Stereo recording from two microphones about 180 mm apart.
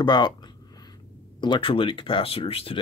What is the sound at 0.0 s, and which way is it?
Speech, 25° left (ahead or behind).